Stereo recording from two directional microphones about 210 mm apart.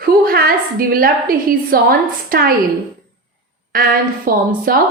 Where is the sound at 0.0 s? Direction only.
45° right (ahead or behind).